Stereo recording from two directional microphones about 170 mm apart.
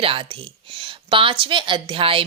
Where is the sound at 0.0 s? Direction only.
35° right (ahead or behind).